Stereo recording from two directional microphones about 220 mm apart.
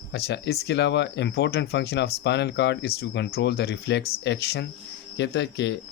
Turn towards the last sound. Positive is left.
turn(degrees=50)  # may be behind; listen again after turning